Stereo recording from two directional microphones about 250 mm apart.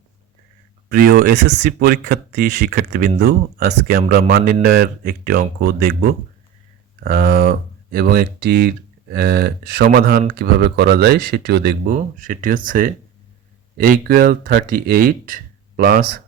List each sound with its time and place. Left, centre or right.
0.9 s speech: right